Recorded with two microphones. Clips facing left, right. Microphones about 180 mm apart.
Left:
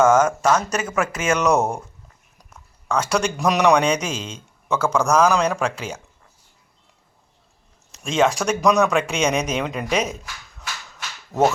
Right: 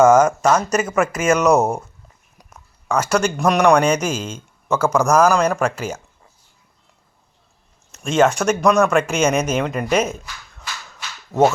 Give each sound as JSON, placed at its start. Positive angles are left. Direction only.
{"t": 0.0, "sound": "speech", "side_deg": -10}
{"t": 2.5, "sound": "a sound", "side_deg": -10}
{"t": 3.6, "sound": "speech", "side_deg": -5}
{"t": 7.9, "sound": "speech", "side_deg": -5}